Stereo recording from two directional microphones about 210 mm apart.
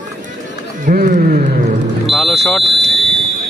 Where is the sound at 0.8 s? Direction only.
40° right (ahead or behind).